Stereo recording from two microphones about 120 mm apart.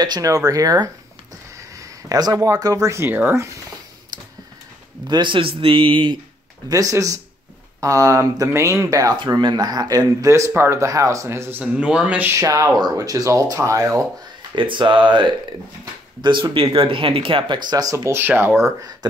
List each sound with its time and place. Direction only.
0.0 s speech: 30° right (ahead or behind)
4.1 s a sound: 35° right (ahead or behind)
5.0 s a man's voice: 40° right (ahead or behind)
6.7 s speech: 30° right (ahead or behind)
11.6 s speech: 10° right (ahead or behind)
12.4 s speech: 25° right (ahead or behind)
14.5 s a man's voice: 40° right (ahead or behind); by 18.7 s 15° right (ahead or behind)